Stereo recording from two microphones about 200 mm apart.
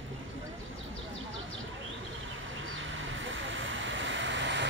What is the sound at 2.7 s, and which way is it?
Vehicle, 70° right (ahead or behind).